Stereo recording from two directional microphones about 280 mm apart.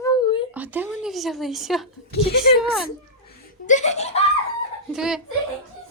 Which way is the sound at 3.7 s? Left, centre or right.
Left.